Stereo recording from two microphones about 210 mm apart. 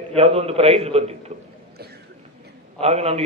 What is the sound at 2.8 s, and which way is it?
Speech, 30° right (ahead or behind).